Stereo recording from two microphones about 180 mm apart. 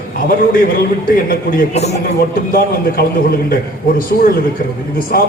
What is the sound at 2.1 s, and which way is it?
A man's voice, 55° left (ahead or behind).